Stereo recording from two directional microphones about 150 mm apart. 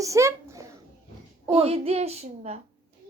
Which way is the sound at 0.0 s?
20° right (ahead or behind).